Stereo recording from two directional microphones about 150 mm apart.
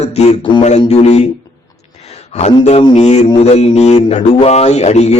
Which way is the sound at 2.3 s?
45° left (ahead or behind).